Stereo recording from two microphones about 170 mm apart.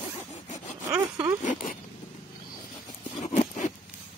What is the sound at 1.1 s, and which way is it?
Speech, 10° right (ahead or behind).